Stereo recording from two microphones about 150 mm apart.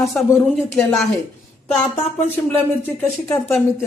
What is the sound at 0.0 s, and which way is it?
A woman's voice, centre (ahead or behind).